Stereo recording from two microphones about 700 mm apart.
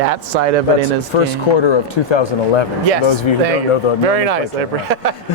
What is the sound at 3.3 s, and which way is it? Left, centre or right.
Speech, left.